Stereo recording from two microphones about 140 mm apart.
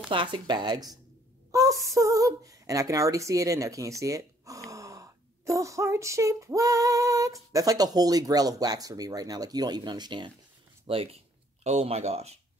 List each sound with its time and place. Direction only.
0.1 s a woman's voice: 35° right (ahead or behind)
10.9 s speech: 40° right (ahead or behind)